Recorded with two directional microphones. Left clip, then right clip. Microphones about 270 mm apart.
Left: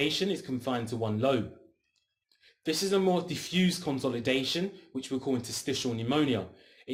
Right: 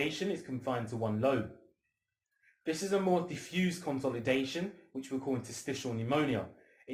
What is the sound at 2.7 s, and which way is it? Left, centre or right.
Speech, left.